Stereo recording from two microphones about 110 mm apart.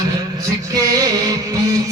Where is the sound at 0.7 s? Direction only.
35° right (ahead or behind).